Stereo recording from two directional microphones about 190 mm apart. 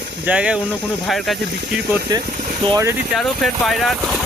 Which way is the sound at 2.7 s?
15° right (ahead or behind).